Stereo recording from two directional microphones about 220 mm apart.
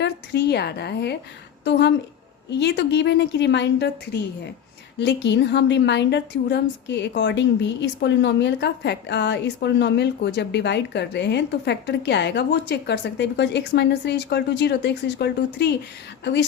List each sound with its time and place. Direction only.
0.0 s speech: 50° left (ahead or behind)
2.5 s a woman's voice: 50° left (ahead or behind)